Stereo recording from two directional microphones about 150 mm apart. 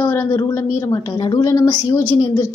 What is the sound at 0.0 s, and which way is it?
A woman's voice, 20° left (ahead or behind).